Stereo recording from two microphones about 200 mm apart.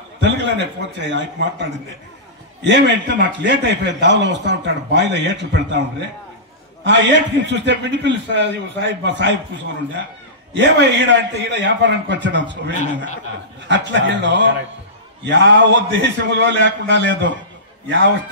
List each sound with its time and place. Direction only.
0.2 s a man's voice: 60° right (ahead or behind)
10.5 s a man's voice: 60° right (ahead or behind)
12.7 s speech: 40° left (ahead or behind)
13.7 s a man's voice: 65° right (ahead or behind)